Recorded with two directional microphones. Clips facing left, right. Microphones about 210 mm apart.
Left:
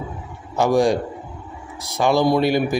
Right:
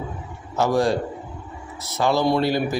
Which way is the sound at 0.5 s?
15° left (ahead or behind).